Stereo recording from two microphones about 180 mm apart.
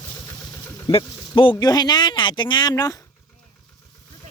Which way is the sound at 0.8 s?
30° left (ahead or behind).